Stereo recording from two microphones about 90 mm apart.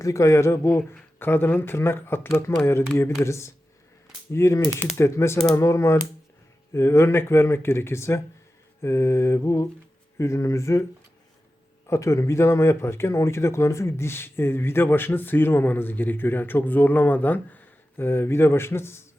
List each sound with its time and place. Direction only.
0.0 s mantra: 35° left (ahead or behind)
1.2 s speech: 25° left (ahead or behind)
3.0 s mantra: 30° left (ahead or behind)
4.9 s speech: 30° left (ahead or behind)
5.5 s mantra: 35° left (ahead or behind)
6.7 s speech: 30° left (ahead or behind)
8.8 s mantra: 30° left (ahead or behind)
11.9 s speech: 35° left (ahead or behind)